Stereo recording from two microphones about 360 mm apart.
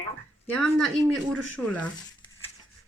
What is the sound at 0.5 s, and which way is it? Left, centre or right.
Speech, centre.